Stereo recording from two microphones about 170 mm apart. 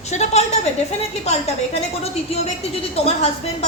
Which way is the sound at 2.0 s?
35° left (ahead or behind).